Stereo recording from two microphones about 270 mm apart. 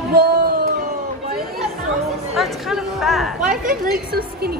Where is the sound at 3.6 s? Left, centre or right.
Right.